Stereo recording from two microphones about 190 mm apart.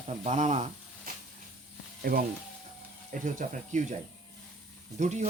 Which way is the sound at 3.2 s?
40° right (ahead or behind).